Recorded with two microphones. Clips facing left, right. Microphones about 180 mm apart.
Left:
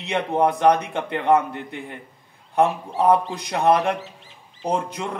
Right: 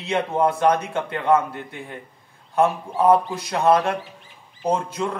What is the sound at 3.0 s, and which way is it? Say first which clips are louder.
A man's voice: right 1 dB; 20° left (ahead or behind).